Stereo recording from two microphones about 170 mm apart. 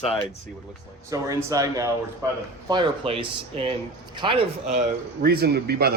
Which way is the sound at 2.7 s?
30° right (ahead or behind).